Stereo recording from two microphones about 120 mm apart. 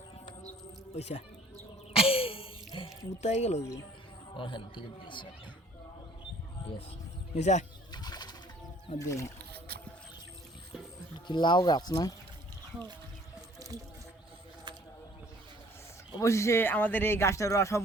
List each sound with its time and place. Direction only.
0.9 s speech: 65° left (ahead or behind)
1.9 s a sound: 50° left (ahead or behind)
3.2 s speech: 70° left (ahead or behind)
4.4 s a man's voice: 45° left (ahead or behind)
7.3 s speech: 75° left (ahead or behind)
7.9 s bird: 35° left (ahead or behind)
9.0 s speech: 25° left (ahead or behind)
11.3 s speech: 40° left (ahead or behind)
16.2 s speech: 25° left (ahead or behind)